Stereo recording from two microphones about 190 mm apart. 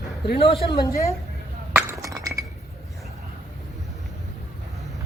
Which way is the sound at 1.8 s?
15° right (ahead or behind).